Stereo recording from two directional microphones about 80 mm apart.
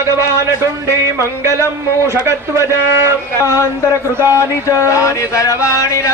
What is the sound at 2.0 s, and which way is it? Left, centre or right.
A man's voice, right.